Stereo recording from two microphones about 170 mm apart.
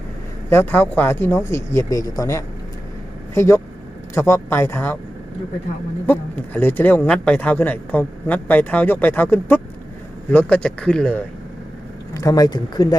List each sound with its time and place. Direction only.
0.5 s speech: 10° left (ahead or behind)
6.1 s speech: 10° left (ahead or behind)
12.1 s speech: 20° left (ahead or behind)